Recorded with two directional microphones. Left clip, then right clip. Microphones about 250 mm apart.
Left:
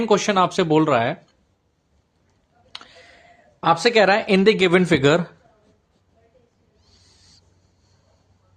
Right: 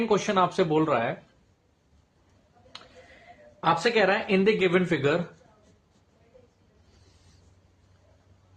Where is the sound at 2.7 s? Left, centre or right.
Left.